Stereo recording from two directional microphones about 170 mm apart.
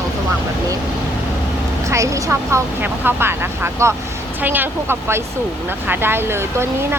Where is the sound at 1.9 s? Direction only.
20° right (ahead or behind).